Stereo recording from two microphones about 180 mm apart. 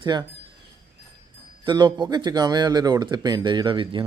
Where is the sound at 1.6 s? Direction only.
25° right (ahead or behind).